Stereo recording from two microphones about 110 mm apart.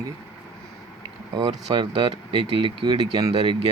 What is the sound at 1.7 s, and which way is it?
Speech, 50° right (ahead or behind).